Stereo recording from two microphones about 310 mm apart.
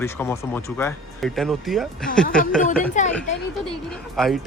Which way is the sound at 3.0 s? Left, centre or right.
Left.